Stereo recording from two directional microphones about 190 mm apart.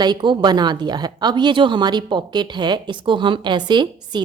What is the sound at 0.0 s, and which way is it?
A woman's voice, 25° right (ahead or behind).